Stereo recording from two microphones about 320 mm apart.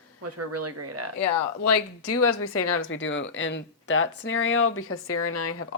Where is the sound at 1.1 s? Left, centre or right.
Left.